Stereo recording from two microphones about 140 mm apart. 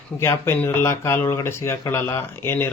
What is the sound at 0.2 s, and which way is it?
Speech, 20° left (ahead or behind).